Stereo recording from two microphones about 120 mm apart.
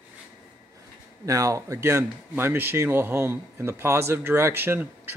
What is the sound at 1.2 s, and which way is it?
Speech, 25° right (ahead or behind).